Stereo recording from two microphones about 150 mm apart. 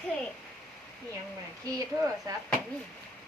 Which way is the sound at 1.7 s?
20° right (ahead or behind).